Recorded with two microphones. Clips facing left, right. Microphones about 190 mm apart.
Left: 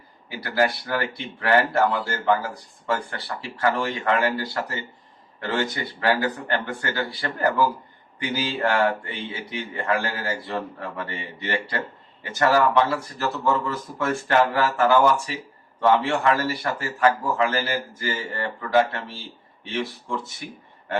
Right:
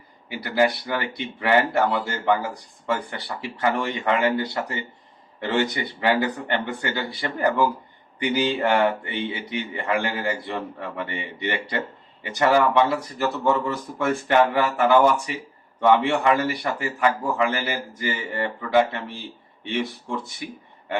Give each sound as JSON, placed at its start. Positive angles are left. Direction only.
{"t": 0.3, "sound": "a man's voice", "side_deg": -20}